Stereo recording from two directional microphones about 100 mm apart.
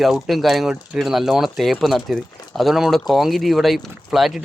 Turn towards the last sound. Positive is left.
turn(degrees=-5)  # may be behind; listen again after turning